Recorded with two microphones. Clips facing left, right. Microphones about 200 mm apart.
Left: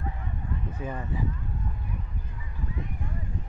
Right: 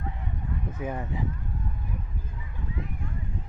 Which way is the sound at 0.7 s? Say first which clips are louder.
Right 3 dB; 10° right (ahead or behind).